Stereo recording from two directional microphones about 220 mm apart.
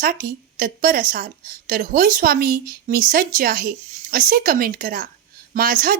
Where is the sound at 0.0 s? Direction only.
40° right (ahead or behind).